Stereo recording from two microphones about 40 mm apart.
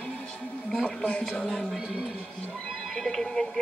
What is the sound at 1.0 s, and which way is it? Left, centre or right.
Speech, left.